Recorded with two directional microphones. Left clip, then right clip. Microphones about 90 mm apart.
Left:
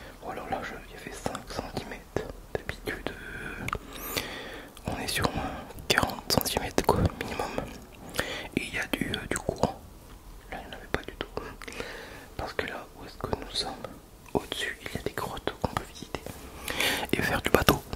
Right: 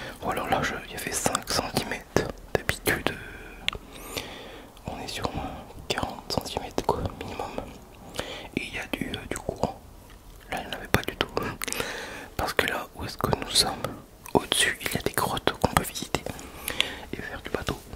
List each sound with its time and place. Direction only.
0.0 s whispering: 45° right (ahead or behind)
3.4 s whispering: 20° left (ahead or behind)
10.5 s whispering: 45° right (ahead or behind)
16.8 s whispering: 40° left (ahead or behind)